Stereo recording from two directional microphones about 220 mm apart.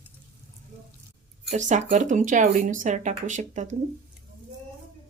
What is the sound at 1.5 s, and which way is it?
Speech, 35° right (ahead or behind).